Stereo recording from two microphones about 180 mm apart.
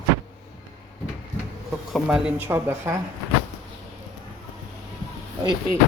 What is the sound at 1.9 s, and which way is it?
Speech, 5° right (ahead or behind).